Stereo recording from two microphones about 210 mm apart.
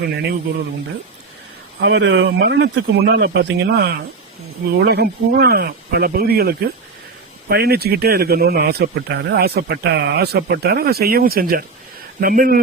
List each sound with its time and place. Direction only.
1.8 s a man's voice: 60° right (ahead or behind); by 12.6 s 40° right (ahead or behind)